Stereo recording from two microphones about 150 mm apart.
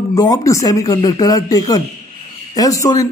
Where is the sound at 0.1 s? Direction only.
25° left (ahead or behind).